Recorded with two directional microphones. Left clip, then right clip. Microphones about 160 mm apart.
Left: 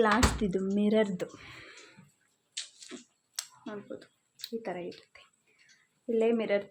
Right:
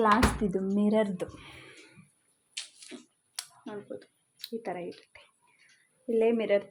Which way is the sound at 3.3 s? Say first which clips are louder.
Even; 5° right (ahead or behind).